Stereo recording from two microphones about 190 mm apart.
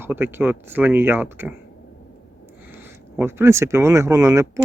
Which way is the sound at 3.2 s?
10° right (ahead or behind).